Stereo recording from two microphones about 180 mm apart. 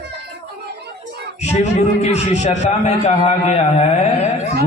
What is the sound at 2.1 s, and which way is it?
A man's voice, 40° left (ahead or behind).